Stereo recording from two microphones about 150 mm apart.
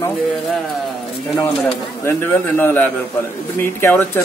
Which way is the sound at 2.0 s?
15° left (ahead or behind).